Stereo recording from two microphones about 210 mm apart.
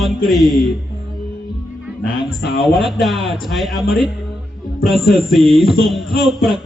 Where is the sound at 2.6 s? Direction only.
Centre (ahead or behind).